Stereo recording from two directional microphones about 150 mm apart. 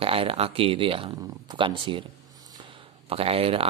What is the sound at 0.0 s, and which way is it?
A man's voice, 40° right (ahead or behind).